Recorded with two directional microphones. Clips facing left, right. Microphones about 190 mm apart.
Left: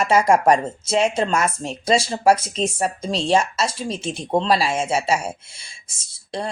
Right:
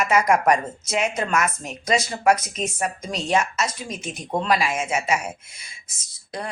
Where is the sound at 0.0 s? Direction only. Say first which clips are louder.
Left 3 dB; 30° left (ahead or behind).